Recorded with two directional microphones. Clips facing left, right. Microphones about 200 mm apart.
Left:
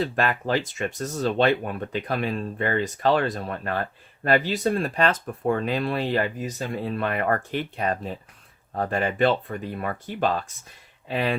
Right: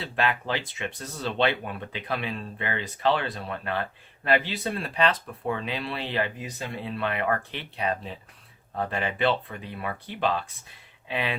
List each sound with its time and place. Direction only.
0.0 s speech: 45° left (ahead or behind)